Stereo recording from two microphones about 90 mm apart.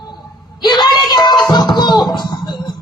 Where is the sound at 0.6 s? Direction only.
55° left (ahead or behind).